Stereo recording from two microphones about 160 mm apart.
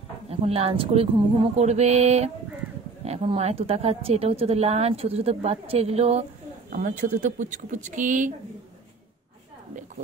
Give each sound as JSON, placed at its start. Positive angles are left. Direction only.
{"t": 0.3, "sound": "a woman's voice", "side_deg": -40}
{"t": 6.7, "sound": "speech", "side_deg": -55}